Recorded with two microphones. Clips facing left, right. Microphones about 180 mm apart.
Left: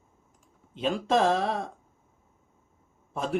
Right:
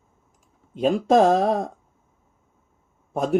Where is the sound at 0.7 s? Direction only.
45° right (ahead or behind).